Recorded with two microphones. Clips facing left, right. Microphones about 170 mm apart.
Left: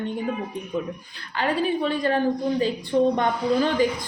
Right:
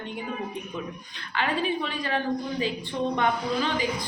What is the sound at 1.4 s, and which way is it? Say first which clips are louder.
Speech: left 4 dB; 45° left (ahead or behind).